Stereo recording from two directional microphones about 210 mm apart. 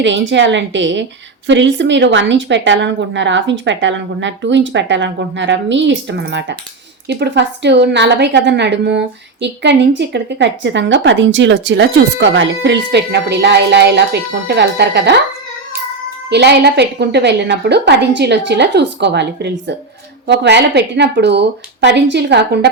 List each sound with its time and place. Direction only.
0.0 s a woman's voice: 60° right (ahead or behind)
16.3 s a woman's voice: 50° right (ahead or behind)